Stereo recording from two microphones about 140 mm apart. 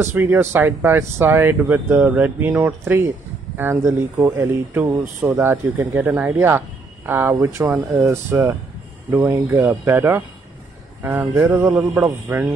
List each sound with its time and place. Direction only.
0.0 s speech: 15° right (ahead or behind)